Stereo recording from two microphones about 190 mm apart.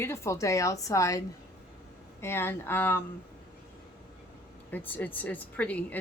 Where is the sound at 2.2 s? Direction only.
15° left (ahead or behind).